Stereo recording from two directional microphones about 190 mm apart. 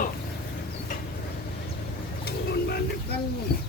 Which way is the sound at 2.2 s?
55° left (ahead or behind).